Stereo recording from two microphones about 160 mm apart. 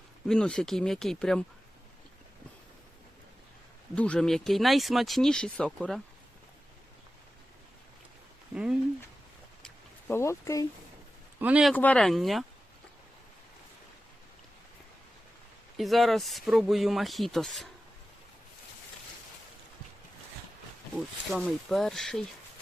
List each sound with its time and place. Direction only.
0.3 s speech: 5° left (ahead or behind)
3.9 s speech: 5° left (ahead or behind)
8.5 s speech: 5° right (ahead or behind)
9.6 s a sound: 15° left (ahead or behind)
11.3 s speech: 10° right (ahead or behind)
11.7 s speech: 10° left (ahead or behind)
15.8 s speech: centre (ahead or behind)
20.9 s speech: centre (ahead or behind)